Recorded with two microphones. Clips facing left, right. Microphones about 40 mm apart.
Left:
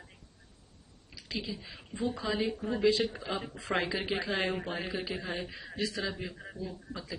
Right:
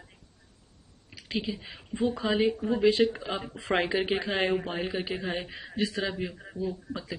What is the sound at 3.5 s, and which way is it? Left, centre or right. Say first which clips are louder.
Speech: right 7 dB; right.